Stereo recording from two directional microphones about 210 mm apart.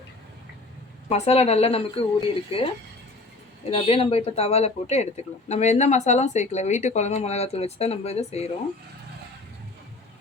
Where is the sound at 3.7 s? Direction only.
30° left (ahead or behind).